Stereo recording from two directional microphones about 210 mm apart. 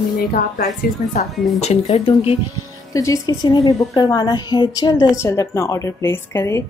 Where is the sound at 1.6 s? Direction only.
30° left (ahead or behind).